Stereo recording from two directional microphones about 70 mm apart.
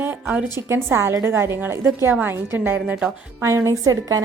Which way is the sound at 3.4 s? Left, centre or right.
Right.